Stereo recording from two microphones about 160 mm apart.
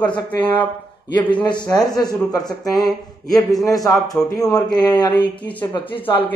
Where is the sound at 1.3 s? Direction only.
30° left (ahead or behind).